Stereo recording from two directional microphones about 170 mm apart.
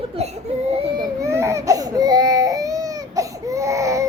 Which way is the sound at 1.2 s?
15° right (ahead or behind).